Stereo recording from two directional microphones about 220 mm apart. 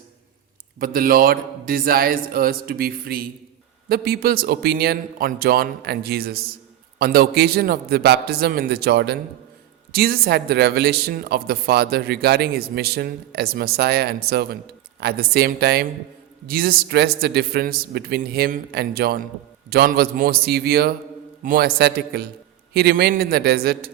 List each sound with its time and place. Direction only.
0.8 s a man's voice: 40° right (ahead or behind)